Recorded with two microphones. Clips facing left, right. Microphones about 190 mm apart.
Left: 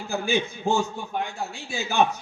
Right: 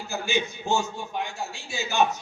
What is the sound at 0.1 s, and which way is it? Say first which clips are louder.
A man's voice: left 3 dB; 55° left (ahead or behind).